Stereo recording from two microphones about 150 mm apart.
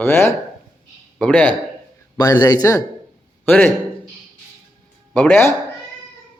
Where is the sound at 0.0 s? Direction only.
15° left (ahead or behind).